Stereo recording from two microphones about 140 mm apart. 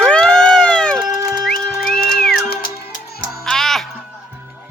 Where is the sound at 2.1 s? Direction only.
5° left (ahead or behind).